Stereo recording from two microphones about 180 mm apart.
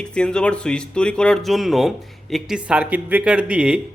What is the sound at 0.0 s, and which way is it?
Speech, 5° left (ahead or behind).